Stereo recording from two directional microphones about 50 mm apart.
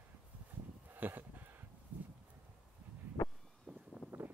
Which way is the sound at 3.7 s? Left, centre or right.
Right.